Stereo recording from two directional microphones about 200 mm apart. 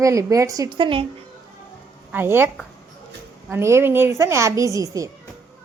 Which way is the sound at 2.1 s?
10° right (ahead or behind).